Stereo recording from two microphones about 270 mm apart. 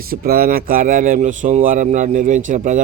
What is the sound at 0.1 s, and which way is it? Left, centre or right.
A man's voice, right.